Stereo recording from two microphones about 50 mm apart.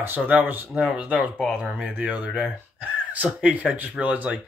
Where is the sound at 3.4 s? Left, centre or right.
Right.